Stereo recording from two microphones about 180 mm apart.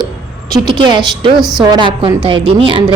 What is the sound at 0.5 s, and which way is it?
Speech, 25° right (ahead or behind).